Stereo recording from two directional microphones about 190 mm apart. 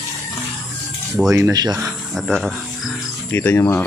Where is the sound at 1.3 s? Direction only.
15° right (ahead or behind).